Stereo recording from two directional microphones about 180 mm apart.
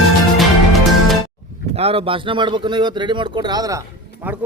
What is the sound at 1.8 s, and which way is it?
Speech, 35° right (ahead or behind).